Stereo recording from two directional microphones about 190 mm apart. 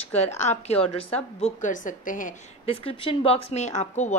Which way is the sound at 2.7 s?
30° left (ahead or behind).